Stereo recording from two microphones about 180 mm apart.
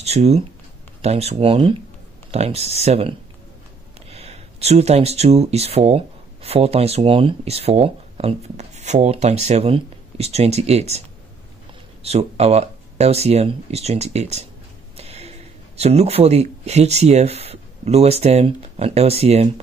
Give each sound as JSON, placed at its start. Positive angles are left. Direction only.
{"t": 0.0, "sound": "speech", "side_deg": -35}
{"t": 12.0, "sound": "speech", "side_deg": -35}
{"t": 15.0, "sound": "a sound", "side_deg": -35}
{"t": 15.8, "sound": "speech", "side_deg": -35}